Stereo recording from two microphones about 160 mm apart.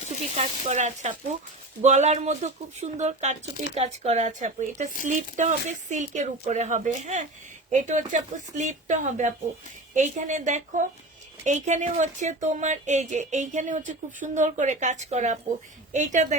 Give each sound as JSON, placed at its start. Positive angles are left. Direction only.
{"t": 0.3, "sound": "speech", "side_deg": -45}